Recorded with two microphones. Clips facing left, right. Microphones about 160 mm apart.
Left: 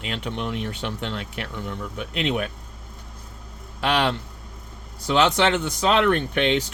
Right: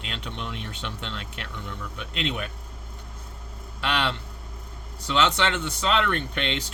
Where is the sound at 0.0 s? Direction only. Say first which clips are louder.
Left 6 dB; 55° left (ahead or behind).